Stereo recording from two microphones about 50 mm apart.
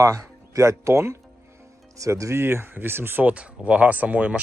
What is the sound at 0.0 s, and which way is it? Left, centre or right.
Speech, right.